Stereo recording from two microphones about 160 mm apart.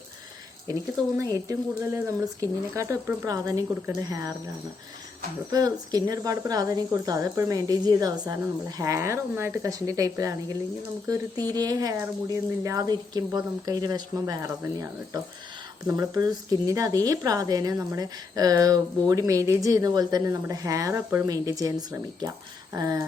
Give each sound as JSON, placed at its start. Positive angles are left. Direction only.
{"t": 0.7, "sound": "a woman's voice", "side_deg": -20}
{"t": 5.5, "sound": "a woman's voice", "side_deg": -25}